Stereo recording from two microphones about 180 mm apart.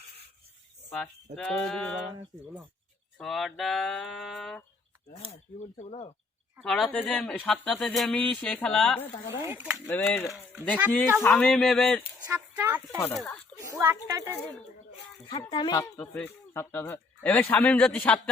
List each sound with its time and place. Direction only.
0.9 s speech: 5° left (ahead or behind)
3.2 s speech: centre (ahead or behind)
5.1 s speech: 35° left (ahead or behind)
6.6 s speech: 5° left (ahead or behind)
9.4 s speech: 10° right (ahead or behind)
9.8 s speech: 10° left (ahead or behind)
12.3 s speech: 10° right (ahead or behind)
13.0 s speech: 10° left (ahead or behind)
13.7 s speech: 15° right (ahead or behind)
15.3 s speech: 25° left (ahead or behind)
16.0 s speech: 5° left (ahead or behind)